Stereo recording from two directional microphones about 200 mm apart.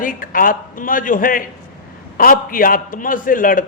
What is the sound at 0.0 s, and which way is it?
A man's voice, 45° left (ahead or behind).